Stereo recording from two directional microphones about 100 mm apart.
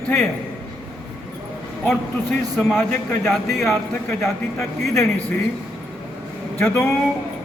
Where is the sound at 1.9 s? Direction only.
5° left (ahead or behind).